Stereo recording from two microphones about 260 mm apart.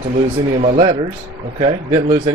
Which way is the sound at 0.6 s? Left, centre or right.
Right.